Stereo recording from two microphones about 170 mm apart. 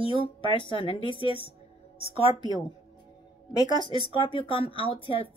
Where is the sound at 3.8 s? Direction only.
30° left (ahead or behind).